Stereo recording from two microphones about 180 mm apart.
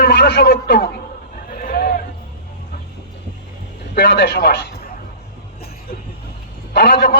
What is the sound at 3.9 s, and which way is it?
A man's voice, 65° left (ahead or behind).